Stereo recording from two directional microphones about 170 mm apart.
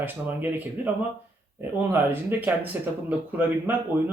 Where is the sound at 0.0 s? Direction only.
10° right (ahead or behind).